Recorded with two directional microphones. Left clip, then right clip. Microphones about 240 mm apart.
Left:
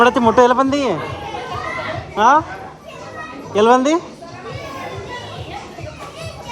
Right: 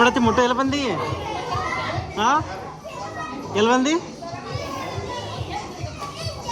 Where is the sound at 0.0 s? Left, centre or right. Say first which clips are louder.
Left 6 dB; centre.